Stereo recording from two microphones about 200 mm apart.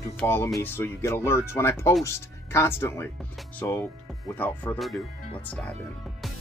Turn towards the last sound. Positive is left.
turn(degrees=0)  # may be behind; listen again after turning